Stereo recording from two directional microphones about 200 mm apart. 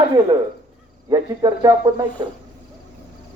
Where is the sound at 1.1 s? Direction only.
15° right (ahead or behind).